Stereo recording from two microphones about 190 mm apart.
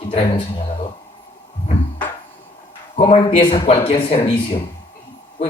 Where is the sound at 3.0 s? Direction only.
30° left (ahead or behind).